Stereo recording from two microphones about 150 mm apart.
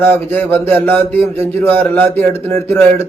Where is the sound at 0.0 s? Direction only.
15° left (ahead or behind).